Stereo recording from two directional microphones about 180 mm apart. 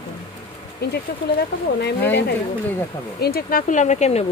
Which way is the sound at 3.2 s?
60° left (ahead or behind).